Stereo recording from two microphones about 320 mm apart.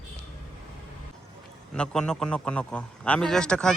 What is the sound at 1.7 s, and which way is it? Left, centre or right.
A man's voice, centre.